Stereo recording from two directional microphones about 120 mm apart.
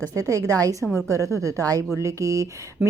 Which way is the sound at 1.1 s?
25° right (ahead or behind).